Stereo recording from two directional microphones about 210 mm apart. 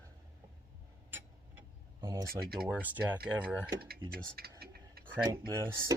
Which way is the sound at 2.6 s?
5° right (ahead or behind).